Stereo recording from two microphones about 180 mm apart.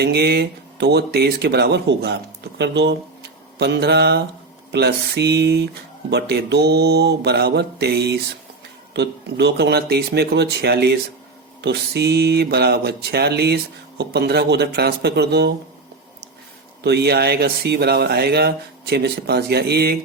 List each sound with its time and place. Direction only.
0.0 s speech: 65° right (ahead or behind)
3.6 s mantra: 65° right (ahead or behind)
6.1 s speech: 65° right (ahead or behind)
16.8 s speech: 65° right (ahead or behind)